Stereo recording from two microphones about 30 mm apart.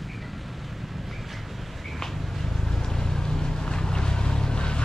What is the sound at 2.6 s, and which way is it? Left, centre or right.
Boat, centre.